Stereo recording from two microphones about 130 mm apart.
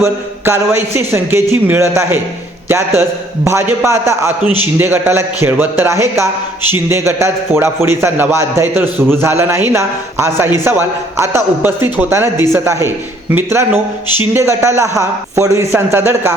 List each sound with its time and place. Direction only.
0.0 s a man's voice: 20° right (ahead or behind)